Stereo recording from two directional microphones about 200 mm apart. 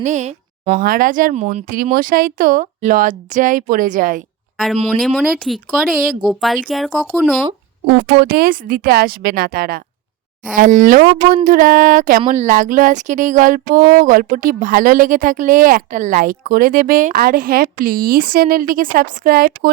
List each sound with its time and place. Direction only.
0.0 s a sound: 35° right (ahead or behind)
0.8 s a woman's voice: 45° right (ahead or behind)
4.5 s a woman's voice: centre (ahead or behind)
7.9 s a woman's voice: 60° right (ahead or behind); by 12.2 s 40° right (ahead or behind)
12.3 s a sound: 40° right (ahead or behind)
14.0 s a woman's voice: 45° right (ahead or behind)